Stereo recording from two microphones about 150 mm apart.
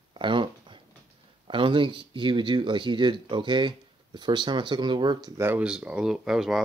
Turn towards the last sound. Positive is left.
turn(degrees=-5)  # may be behind; listen again after turning